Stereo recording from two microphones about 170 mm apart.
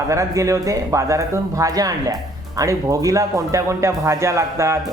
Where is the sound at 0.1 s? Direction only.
20° right (ahead or behind).